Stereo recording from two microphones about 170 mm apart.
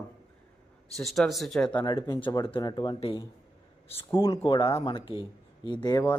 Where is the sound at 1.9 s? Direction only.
30° left (ahead or behind).